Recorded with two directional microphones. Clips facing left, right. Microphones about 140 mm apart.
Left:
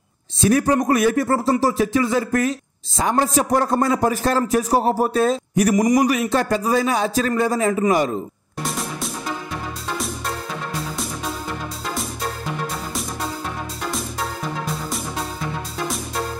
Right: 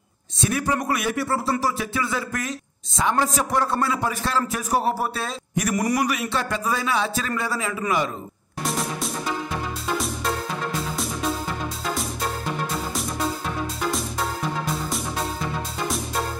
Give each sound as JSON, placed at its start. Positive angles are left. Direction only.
{"t": 0.4, "sound": "a man's voice", "side_deg": 35}
{"t": 5.8, "sound": "a man's voice", "side_deg": 15}
{"t": 6.0, "sound": "a man's voice", "side_deg": 40}
{"t": 8.6, "sound": "music", "side_deg": 0}
{"t": 11.9, "sound": "music", "side_deg": 0}